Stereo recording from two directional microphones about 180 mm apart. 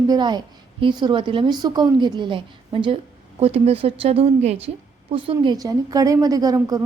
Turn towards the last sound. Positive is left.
turn(degrees=-20)  # may be behind; listen again after turning